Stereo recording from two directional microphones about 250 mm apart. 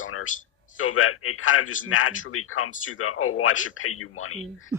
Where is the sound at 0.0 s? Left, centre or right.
Left.